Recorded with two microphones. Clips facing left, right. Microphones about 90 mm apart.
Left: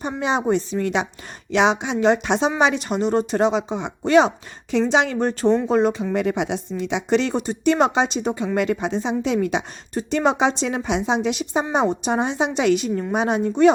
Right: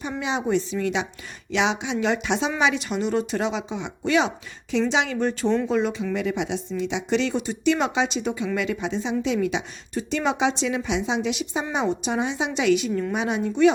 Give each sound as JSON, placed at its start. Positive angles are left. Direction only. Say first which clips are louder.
{"t": 0.0, "sound": "a woman's voice", "louder": "left 4 dB", "side_deg": 45}